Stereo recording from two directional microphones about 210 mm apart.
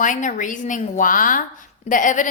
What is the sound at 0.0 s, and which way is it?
A woman's voice, 40° left (ahead or behind).